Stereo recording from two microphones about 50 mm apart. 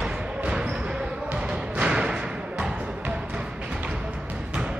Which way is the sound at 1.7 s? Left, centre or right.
Right.